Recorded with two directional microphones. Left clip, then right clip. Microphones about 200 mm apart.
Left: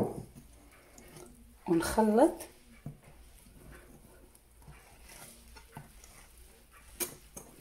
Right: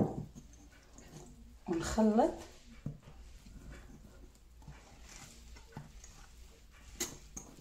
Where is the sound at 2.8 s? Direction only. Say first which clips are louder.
Right 2 dB; centre (ahead or behind).